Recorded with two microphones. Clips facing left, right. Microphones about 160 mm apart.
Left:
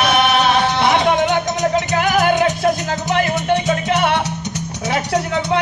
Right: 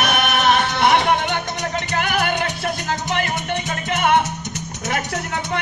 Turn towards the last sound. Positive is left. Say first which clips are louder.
# left 1 dB
turn(degrees=-50)  # may be behind; listen again after turning